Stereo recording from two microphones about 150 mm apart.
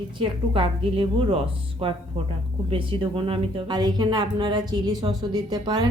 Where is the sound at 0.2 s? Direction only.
35° right (ahead or behind).